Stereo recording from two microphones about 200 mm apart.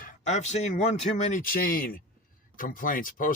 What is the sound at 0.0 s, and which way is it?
Speech, 35° left (ahead or behind).